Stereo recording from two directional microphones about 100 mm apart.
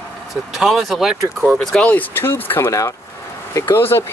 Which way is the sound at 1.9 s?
20° left (ahead or behind).